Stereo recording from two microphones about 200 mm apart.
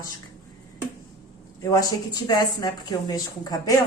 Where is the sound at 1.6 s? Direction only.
20° left (ahead or behind).